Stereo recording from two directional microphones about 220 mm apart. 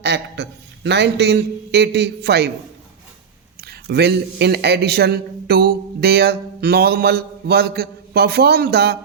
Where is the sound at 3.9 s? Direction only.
50° right (ahead or behind).